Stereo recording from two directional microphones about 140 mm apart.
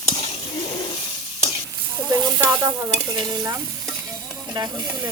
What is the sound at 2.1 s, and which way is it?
Stir, 25° right (ahead or behind).